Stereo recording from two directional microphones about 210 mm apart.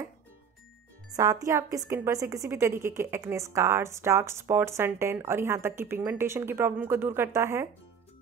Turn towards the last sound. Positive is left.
turn(degrees=-10)  # may be behind; listen again after turning